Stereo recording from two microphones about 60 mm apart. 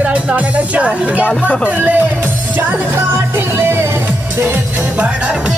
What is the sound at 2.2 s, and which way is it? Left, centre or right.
Music, right.